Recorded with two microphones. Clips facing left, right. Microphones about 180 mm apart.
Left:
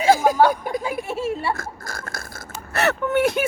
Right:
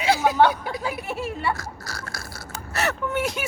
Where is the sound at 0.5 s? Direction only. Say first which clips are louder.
Left 5 dB; 50° left (ahead or behind).